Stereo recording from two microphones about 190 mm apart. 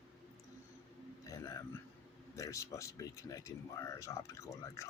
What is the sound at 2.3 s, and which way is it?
Speech, 15° left (ahead or behind).